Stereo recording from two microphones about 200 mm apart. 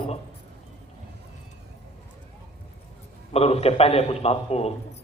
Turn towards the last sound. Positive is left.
turn(degrees=30)  # may be behind; listen again after turning